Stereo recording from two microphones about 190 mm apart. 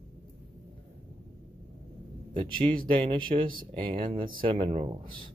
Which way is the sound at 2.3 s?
25° right (ahead or behind).